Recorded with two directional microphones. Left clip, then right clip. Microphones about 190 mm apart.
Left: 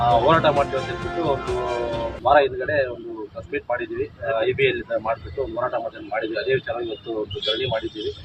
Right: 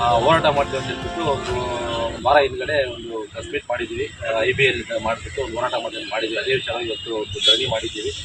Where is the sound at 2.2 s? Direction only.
15° left (ahead or behind).